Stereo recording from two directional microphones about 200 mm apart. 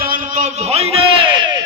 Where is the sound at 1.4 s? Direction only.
20° right (ahead or behind).